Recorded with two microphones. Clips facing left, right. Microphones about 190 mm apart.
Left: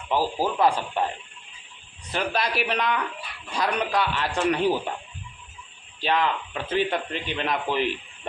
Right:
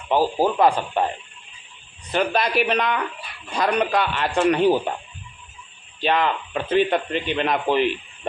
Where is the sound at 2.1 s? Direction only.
60° right (ahead or behind).